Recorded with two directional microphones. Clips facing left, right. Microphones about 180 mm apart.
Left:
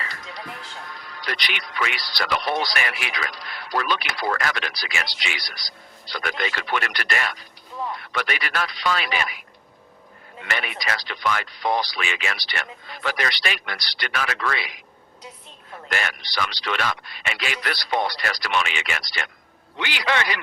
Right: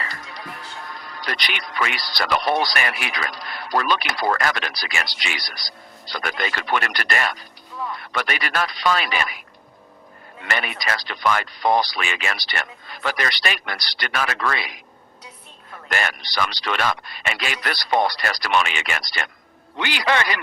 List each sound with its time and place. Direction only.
0.9 s speech: 45° right (ahead or behind)
10.4 s speech: 45° right (ahead or behind)
15.9 s speech: 45° right (ahead or behind)